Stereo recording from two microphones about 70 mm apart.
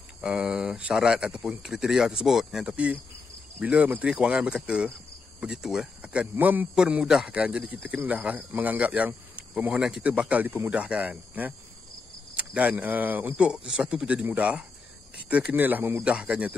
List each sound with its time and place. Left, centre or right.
0.2 s speech: centre
2.7 s speech: centre
6.0 s speech: right
6.9 s speech: centre
13.5 s speech: centre
16.1 s speech: centre